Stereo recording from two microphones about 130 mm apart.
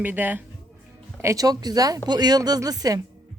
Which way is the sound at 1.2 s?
25° right (ahead or behind).